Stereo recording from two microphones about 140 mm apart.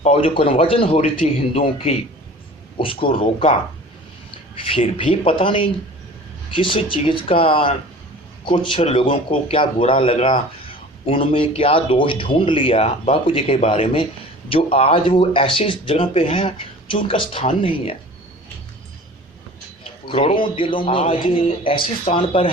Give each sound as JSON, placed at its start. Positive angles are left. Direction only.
{"t": 0.0, "sound": "a man's voice", "side_deg": 45}
{"t": 19.8, "sound": "a man's voice", "side_deg": 40}